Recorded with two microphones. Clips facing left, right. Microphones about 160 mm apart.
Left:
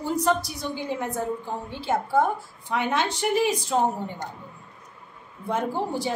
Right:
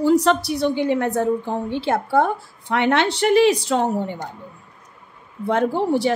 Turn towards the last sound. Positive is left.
turn(degrees=-70)  # may be behind; listen again after turning